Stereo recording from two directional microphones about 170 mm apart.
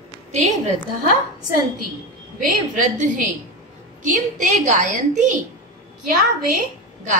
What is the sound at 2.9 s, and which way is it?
Speech, 45° right (ahead or behind).